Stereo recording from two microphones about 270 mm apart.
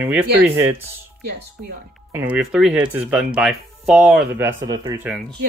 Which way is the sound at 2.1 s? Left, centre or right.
Centre.